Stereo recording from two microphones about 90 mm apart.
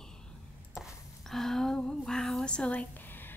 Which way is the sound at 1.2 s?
5° left (ahead or behind).